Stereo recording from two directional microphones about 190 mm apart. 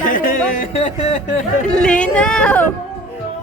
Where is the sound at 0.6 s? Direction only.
35° left (ahead or behind).